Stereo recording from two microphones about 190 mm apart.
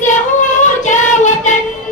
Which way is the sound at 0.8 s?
40° left (ahead or behind).